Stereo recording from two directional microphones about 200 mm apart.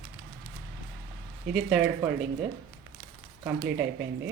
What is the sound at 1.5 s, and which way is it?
Speech, 5° right (ahead or behind).